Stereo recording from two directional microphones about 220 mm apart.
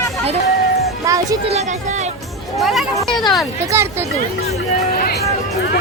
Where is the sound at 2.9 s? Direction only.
20° left (ahead or behind).